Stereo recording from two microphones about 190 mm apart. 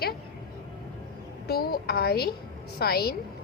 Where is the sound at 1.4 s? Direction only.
55° left (ahead or behind).